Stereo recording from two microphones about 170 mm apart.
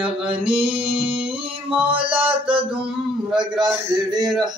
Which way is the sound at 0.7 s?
10° right (ahead or behind).